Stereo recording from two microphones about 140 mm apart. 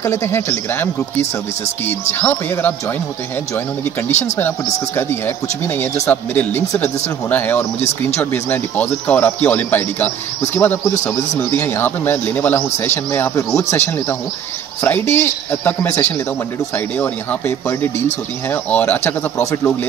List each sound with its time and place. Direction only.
0.0 s a man's voice: 20° left (ahead or behind)
4.1 s speech: 55° left (ahead or behind)
4.4 s a man's voice: 15° left (ahead or behind)